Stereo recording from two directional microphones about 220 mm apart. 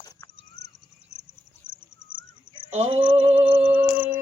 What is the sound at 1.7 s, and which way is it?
Bird, 35° right (ahead or behind).